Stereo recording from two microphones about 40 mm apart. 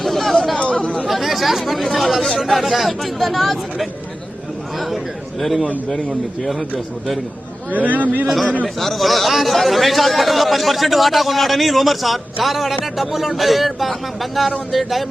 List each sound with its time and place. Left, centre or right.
0.0 s a sound: centre
0.6 s chatter: left
1.0 s speech: centre
5.4 s speech: centre
7.7 s a man's voice: right
8.3 s speech: centre